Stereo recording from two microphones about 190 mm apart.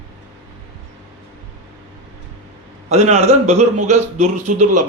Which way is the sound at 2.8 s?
35° right (ahead or behind).